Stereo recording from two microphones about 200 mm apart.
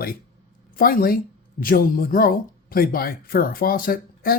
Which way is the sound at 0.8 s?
45° left (ahead or behind).